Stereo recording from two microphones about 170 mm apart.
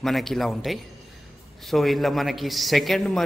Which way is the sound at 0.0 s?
Centre (ahead or behind).